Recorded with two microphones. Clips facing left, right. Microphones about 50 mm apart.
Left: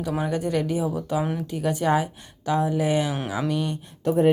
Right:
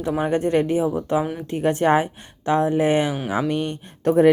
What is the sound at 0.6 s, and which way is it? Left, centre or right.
Speech, right.